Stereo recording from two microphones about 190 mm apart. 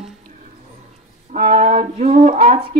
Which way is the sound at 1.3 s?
35° right (ahead or behind).